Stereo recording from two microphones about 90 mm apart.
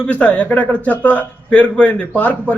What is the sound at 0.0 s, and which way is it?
A man's voice, 15° left (ahead or behind).